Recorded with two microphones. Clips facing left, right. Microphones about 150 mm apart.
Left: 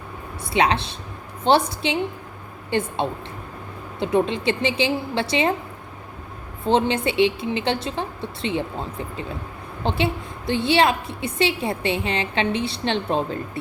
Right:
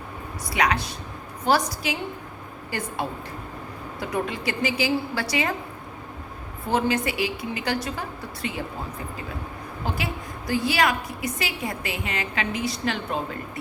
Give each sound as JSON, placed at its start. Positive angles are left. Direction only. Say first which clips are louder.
{"t": 0.5, "sound": "a woman's voice", "louder": "left 4 dB", "side_deg": 25}
{"t": 6.7, "sound": "a woman's voice", "louder": "left 4 dB", "side_deg": 25}
{"t": 9.8, "sound": "a woman's voice", "louder": "left 7 dB", "side_deg": 25}